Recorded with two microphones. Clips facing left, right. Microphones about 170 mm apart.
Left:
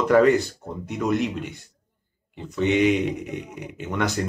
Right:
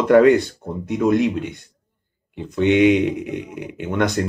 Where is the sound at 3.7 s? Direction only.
65° right (ahead or behind).